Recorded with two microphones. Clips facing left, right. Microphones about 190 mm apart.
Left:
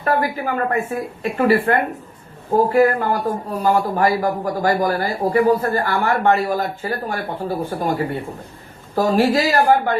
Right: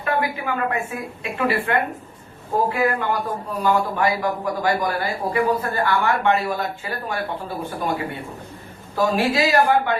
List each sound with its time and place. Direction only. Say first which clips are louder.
0.0 s speech: left 3 dB; 40° left (ahead or behind)
9.0 s speech: left 3 dB; 40° left (ahead or behind)